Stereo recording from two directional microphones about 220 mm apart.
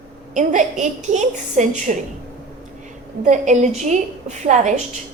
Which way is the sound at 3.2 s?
35° right (ahead or behind).